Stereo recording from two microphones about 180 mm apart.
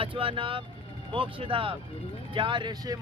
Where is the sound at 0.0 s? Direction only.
30° right (ahead or behind).